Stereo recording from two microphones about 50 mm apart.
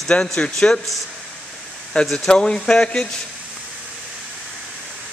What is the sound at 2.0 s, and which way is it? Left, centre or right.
Speech, centre.